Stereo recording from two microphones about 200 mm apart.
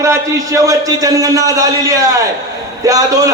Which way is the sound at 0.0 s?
15° right (ahead or behind).